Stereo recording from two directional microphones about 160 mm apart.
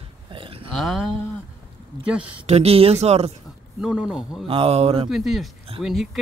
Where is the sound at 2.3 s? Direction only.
40° right (ahead or behind).